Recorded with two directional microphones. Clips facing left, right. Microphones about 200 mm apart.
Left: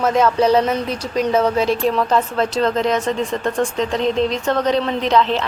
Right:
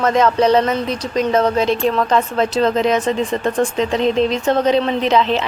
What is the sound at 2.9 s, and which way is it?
A woman's voice, 5° right (ahead or behind).